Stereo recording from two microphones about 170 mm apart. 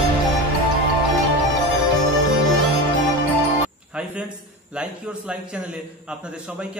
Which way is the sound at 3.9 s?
5° right (ahead or behind).